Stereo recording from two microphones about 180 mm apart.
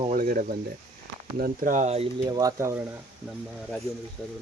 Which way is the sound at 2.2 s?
20° right (ahead or behind).